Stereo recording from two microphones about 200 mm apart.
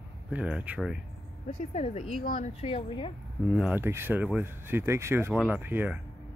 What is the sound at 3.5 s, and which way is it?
Speech, 5° right (ahead or behind).